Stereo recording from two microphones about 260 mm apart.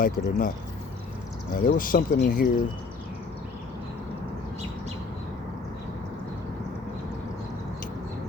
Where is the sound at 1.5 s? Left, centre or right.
Left.